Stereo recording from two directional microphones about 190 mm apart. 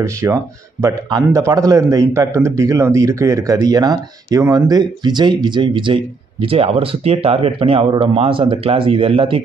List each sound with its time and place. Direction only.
0.0 s speech: 15° right (ahead or behind)